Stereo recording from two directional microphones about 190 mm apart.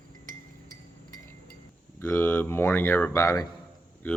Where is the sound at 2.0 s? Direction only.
10° left (ahead or behind).